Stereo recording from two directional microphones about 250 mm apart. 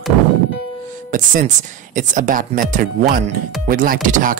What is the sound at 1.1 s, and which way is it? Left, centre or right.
Speech, right.